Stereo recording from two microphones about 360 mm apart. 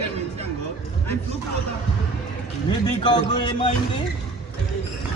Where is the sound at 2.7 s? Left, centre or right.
Centre.